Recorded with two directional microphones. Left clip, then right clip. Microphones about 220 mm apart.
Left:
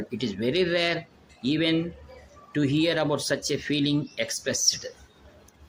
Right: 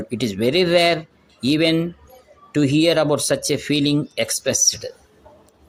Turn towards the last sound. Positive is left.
turn(degrees=-15)  # may be behind; listen again after turning